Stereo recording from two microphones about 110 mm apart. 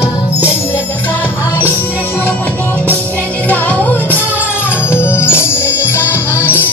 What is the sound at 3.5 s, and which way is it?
Music, 15° left (ahead or behind).